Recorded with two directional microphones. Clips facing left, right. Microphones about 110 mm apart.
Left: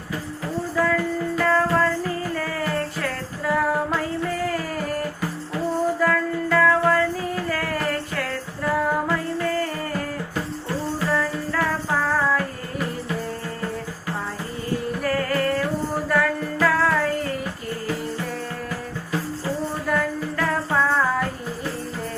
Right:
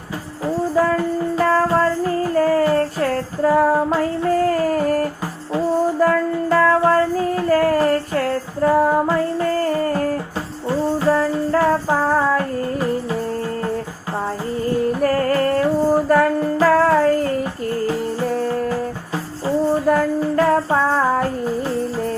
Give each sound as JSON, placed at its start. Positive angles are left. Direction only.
{"t": 0.8, "sound": "music", "side_deg": -30}
{"t": 4.4, "sound": "music", "side_deg": -40}
{"t": 6.0, "sound": "music", "side_deg": -30}
{"t": 9.6, "sound": "music", "side_deg": -40}
{"t": 15.0, "sound": "music", "side_deg": -40}
{"t": 18.3, "sound": "music", "side_deg": -40}
{"t": 19.7, "sound": "music", "side_deg": -30}